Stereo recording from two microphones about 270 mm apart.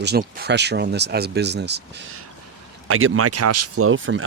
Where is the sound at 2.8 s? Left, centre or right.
Right.